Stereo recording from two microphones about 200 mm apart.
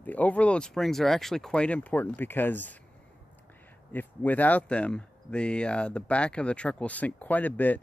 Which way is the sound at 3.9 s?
10° left (ahead or behind).